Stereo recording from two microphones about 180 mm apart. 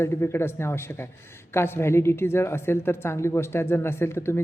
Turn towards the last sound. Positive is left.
turn(degrees=15)  # may be behind; listen again after turning